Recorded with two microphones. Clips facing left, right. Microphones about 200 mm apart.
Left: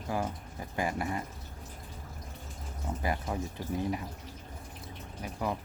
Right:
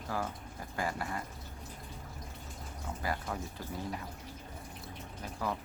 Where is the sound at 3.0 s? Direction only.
20° left (ahead or behind).